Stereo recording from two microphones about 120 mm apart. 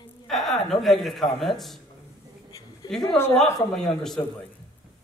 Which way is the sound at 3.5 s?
5° left (ahead or behind).